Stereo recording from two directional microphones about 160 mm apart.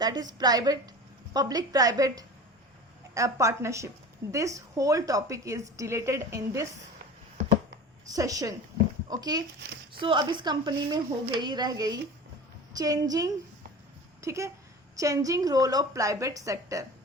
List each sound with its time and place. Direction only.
0.0 s a woman's voice: 25° right (ahead or behind)
8.0 s a woman's voice: 20° right (ahead or behind)